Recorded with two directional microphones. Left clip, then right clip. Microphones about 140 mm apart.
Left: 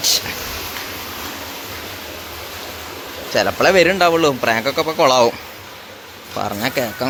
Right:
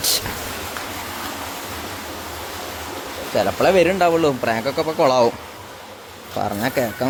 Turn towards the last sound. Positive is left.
turn(degrees=-25)  # may be behind; listen again after turning